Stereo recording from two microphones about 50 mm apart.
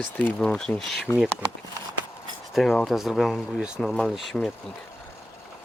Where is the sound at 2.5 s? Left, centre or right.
Centre.